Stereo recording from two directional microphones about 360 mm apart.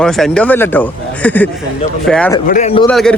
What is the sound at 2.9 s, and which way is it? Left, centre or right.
Speech, centre.